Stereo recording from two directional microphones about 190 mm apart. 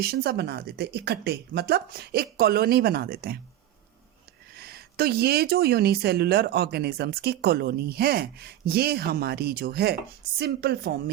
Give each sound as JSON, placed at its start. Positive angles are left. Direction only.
{"t": 0.0, "sound": "speech", "side_deg": -55}
{"t": 4.5, "sound": "speech", "side_deg": -55}